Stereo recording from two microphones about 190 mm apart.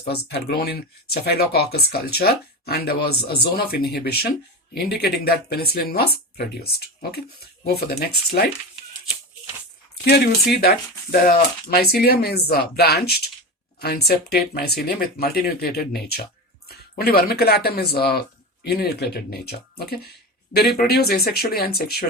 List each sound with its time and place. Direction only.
0.0 s speech: 60° left (ahead or behind)
10.6 s speech: 50° left (ahead or behind)